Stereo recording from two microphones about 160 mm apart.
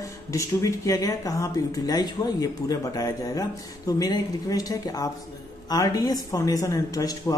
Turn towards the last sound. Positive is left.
turn(degrees=20)  # may be behind; listen again after turning